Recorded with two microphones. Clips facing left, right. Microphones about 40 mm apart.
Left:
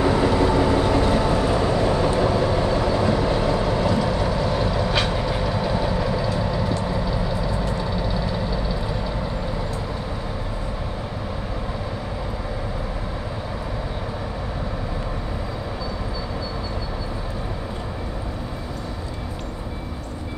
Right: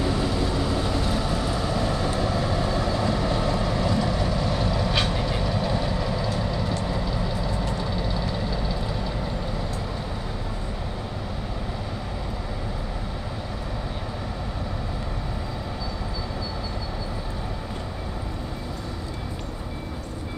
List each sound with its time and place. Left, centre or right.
0.0 s vehicle: left; by 9.1 s centre